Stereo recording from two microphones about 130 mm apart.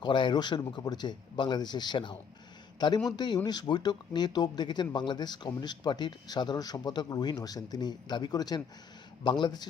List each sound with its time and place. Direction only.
0.0 s a man's voice: 35° left (ahead or behind)